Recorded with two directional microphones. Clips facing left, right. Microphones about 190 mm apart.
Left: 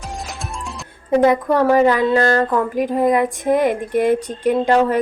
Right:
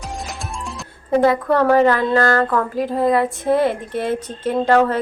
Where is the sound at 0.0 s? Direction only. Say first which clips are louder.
Even; centre (ahead or behind).